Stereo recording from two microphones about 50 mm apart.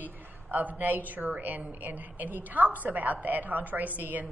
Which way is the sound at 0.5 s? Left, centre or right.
Right.